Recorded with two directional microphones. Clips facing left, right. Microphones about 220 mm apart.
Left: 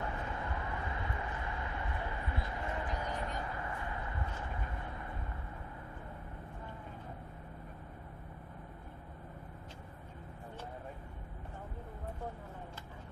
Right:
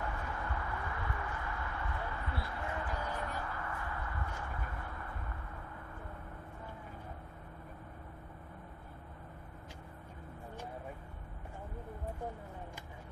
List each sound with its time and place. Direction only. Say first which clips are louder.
0.3 s vehicle: even; 20° left (ahead or behind)